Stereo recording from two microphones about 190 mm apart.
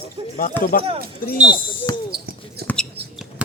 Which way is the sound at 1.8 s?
25° left (ahead or behind).